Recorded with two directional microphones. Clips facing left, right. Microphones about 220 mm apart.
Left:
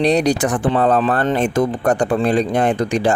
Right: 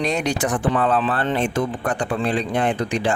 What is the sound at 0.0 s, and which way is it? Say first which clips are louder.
A man's voice: left 7 dB; 35° left (ahead or behind).